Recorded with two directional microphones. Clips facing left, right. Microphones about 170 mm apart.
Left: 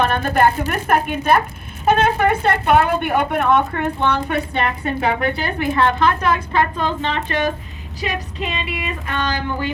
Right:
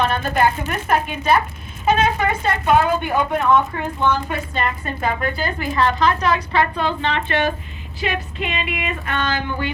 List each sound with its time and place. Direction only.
0.0 s a woman's voice: 55° left (ahead or behind); by 9.7 s 40° left (ahead or behind)